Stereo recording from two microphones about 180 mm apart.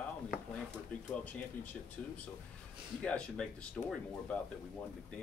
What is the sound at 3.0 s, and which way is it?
Speech, 5° left (ahead or behind).